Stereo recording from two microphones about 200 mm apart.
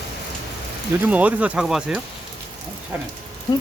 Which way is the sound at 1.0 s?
5° right (ahead or behind).